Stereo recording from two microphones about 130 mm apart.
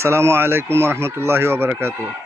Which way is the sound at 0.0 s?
20° right (ahead or behind).